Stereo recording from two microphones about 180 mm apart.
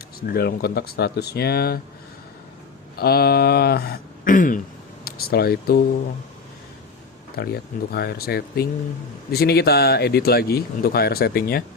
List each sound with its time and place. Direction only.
0.2 s speech: 60° left (ahead or behind)
3.0 s speech: 60° left (ahead or behind)
7.3 s speech: 60° left (ahead or behind)